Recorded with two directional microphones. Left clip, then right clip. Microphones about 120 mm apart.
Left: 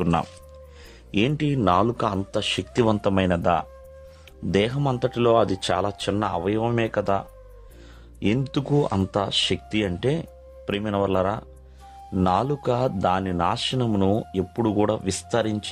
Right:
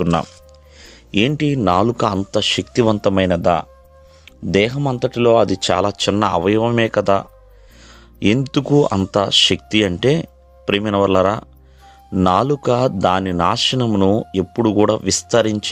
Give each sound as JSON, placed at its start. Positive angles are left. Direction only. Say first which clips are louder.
{"t": 0.0, "sound": "a man's voice", "louder": "right 5 dB", "side_deg": -30}
{"t": 2.7, "sound": "a man's voice", "louder": "right 5 dB", "side_deg": -30}
{"t": 6.6, "sound": "a man's voice", "louder": "right 7 dB", "side_deg": -45}